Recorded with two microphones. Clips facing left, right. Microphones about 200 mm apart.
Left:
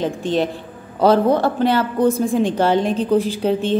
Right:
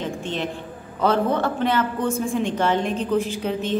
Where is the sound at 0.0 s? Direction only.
35° left (ahead or behind).